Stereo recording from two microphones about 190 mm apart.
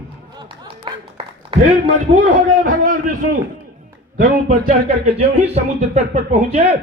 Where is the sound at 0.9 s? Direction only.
25° right (ahead or behind).